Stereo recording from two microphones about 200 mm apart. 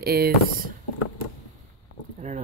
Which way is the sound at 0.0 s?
50° right (ahead or behind).